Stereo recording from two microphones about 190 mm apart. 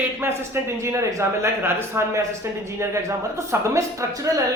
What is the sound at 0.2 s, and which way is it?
A man's voice, 15° right (ahead or behind).